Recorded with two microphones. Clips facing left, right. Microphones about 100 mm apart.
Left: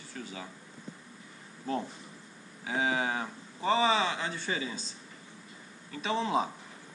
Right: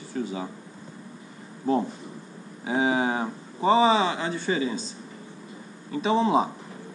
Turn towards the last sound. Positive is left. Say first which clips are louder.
# right 8 dB
turn(degrees=-20)  # may be behind; listen again after turning